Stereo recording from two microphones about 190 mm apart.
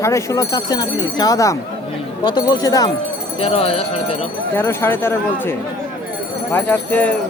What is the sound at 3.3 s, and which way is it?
Speech, 30° left (ahead or behind).